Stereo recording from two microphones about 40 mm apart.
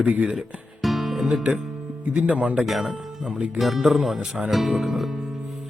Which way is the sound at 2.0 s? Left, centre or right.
Right.